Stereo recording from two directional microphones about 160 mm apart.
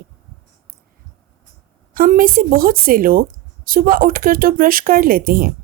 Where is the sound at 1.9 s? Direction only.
65° right (ahead or behind).